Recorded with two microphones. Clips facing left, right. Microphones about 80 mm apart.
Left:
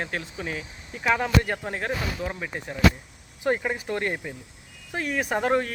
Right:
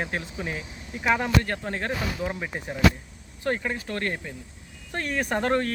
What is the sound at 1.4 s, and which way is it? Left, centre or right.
Speech, centre.